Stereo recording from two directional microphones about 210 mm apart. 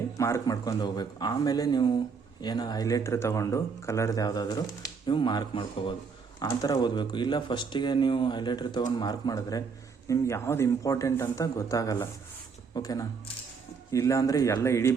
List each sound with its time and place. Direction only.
0.2 s speech: 15° left (ahead or behind)